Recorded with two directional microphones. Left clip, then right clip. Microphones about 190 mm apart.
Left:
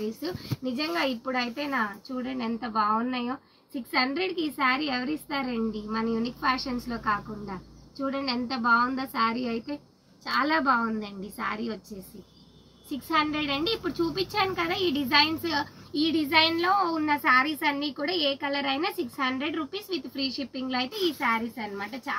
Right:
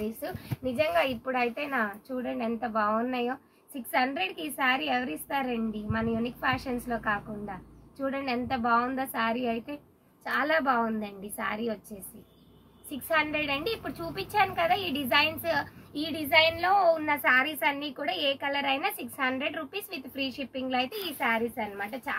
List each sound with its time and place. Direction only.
0.7 s a woman's voice: 45° right (ahead or behind)
12.9 s a woman's voice: 45° right (ahead or behind)